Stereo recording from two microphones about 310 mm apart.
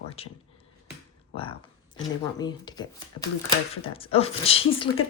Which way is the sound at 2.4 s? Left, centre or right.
Centre.